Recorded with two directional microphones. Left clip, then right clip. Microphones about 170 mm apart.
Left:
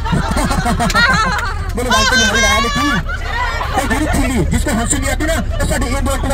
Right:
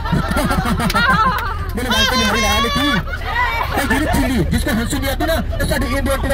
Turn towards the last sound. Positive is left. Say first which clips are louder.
# even
turn(degrees=-30)  # may be behind; listen again after turning